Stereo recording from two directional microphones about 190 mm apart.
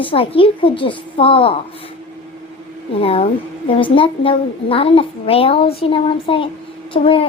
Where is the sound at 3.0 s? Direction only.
30° left (ahead or behind).